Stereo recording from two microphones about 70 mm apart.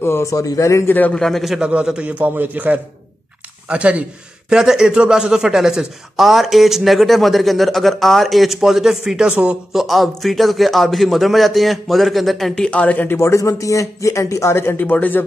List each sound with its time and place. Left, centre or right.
0.0 s a man's voice: left
0.3 s speech: left
0.8 s a man's voice: left
1.1 s speech: centre
1.6 s a man's voice: centre
9.7 s speech: centre; by 13.2 s left
13.2 s speech: left